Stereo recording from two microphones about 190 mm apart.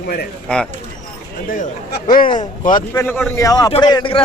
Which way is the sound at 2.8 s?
15° left (ahead or behind).